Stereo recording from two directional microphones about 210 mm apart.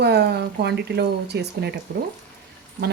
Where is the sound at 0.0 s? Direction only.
50° right (ahead or behind).